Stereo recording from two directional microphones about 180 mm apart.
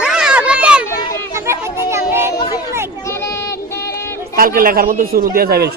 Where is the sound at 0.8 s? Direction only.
15° left (ahead or behind).